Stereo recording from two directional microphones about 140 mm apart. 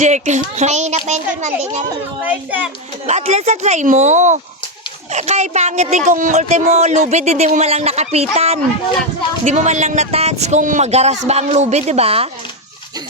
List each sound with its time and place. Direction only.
0.0 s a child's voice: 60° right (ahead or behind)
2.2 s a child's voice: 10° right (ahead or behind)
3.1 s a child's voice: 50° right (ahead or behind)